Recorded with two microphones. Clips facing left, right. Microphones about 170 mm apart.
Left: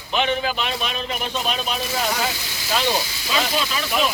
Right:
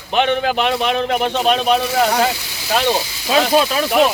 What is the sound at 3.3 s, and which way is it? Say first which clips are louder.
Speech: right 9 dB; 55° right (ahead or behind).